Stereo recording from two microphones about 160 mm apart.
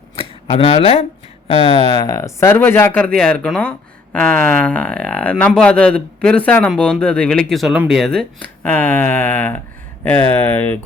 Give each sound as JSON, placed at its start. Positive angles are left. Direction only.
{"t": 0.2, "sound": "speech", "side_deg": 35}